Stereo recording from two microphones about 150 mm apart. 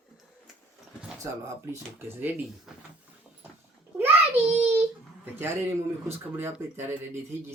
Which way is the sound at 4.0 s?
15° right (ahead or behind).